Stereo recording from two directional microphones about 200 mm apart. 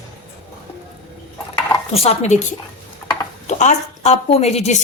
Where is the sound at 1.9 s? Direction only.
30° left (ahead or behind).